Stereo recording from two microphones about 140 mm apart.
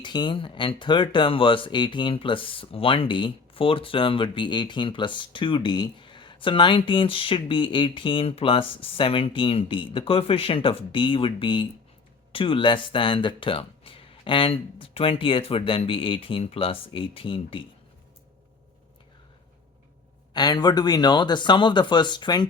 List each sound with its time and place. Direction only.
0.0 s speech: 30° left (ahead or behind)
20.3 s speech: 30° left (ahead or behind)